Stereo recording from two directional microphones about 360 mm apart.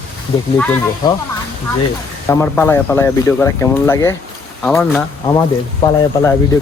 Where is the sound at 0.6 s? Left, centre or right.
Centre.